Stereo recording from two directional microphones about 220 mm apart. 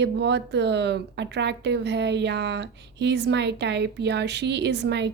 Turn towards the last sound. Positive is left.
turn(degrees=-50)  # may be behind; listen again after turning